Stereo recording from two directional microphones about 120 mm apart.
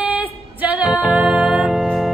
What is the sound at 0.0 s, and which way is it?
Music, 15° right (ahead or behind).